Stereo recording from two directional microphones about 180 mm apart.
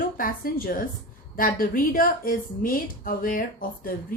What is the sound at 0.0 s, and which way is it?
A woman's voice, 50° left (ahead or behind).